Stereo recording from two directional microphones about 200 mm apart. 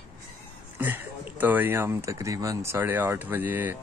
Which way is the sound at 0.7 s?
10° right (ahead or behind).